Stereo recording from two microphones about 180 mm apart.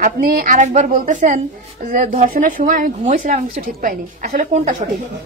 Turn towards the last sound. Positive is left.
turn(degrees=-45)  # may be behind; listen again after turning